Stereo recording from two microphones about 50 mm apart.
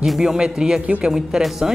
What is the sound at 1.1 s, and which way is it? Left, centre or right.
Speech, centre.